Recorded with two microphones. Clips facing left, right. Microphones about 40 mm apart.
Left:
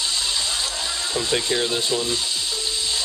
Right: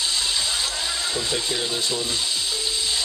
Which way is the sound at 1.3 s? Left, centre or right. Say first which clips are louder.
Left 4 dB; centre.